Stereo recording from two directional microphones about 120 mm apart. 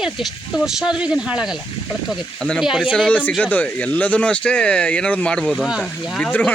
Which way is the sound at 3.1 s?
15° left (ahead or behind).